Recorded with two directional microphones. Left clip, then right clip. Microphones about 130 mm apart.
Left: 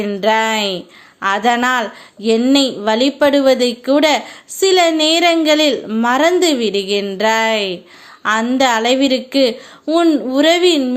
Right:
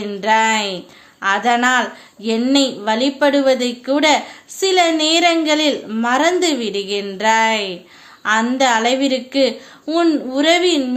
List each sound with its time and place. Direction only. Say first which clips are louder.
0.0 s speech: left 1 dB; 35° left (ahead or behind)
9.8 s speech: left 3 dB; 25° left (ahead or behind)